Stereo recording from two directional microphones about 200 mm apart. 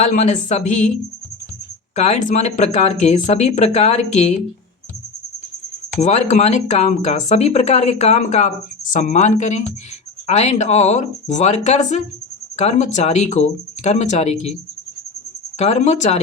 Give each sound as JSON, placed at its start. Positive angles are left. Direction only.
{"t": 0.0, "sound": "speech", "side_deg": 35}
{"t": 2.0, "sound": "speech", "side_deg": 35}
{"t": 6.0, "sound": "speech", "side_deg": 35}